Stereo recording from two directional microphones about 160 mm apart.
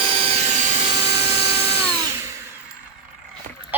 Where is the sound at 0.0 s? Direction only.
40° right (ahead or behind).